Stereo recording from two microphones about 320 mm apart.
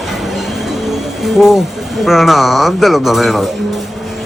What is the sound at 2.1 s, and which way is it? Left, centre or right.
A man's voice, centre.